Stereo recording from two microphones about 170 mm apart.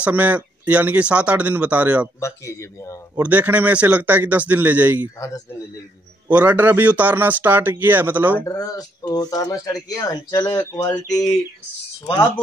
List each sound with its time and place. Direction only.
0.0 s speech: 10° right (ahead or behind)
2.1 s speech: 15° left (ahead or behind)
3.2 s speech: 10° right (ahead or behind)
5.0 s speech: 20° left (ahead or behind)
6.2 s speech: 10° right (ahead or behind)
8.4 s speech: 20° left (ahead or behind)